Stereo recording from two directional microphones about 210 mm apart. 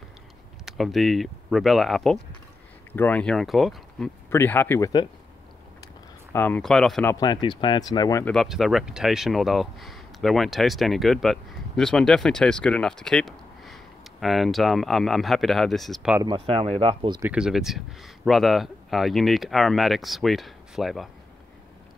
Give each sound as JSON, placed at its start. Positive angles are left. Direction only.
{"t": 0.7, "sound": "speech", "side_deg": 0}
{"t": 4.3, "sound": "speech", "side_deg": 10}
{"t": 6.3, "sound": "speech", "side_deg": 10}
{"t": 7.1, "sound": "speech", "side_deg": 20}
{"t": 8.3, "sound": "speech", "side_deg": 0}
{"t": 16.2, "sound": "speech", "side_deg": -25}
{"t": 17.2, "sound": "speech", "side_deg": -5}